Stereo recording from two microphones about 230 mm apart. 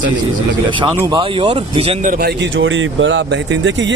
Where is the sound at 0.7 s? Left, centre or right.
Right.